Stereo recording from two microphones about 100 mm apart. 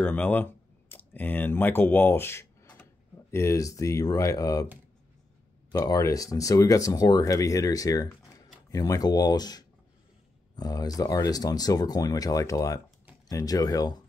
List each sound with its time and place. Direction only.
0.0 s speech: 15° left (ahead or behind)
2.6 s a sound: 15° left (ahead or behind)
3.3 s speech: 30° left (ahead or behind)
5.7 s speech: 35° left (ahead or behind)